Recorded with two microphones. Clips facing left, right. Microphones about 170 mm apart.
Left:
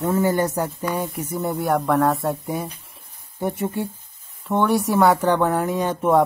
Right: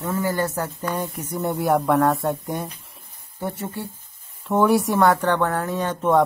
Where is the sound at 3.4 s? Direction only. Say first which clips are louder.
Left 5 dB; 15° left (ahead or behind).